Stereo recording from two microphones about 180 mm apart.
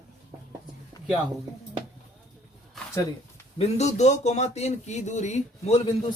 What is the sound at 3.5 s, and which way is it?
Speech, 40° left (ahead or behind).